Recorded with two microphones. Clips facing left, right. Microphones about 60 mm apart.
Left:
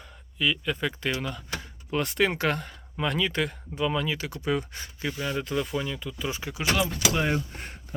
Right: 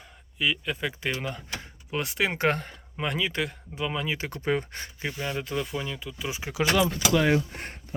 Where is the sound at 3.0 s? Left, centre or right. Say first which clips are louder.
Left 2 dB; centre.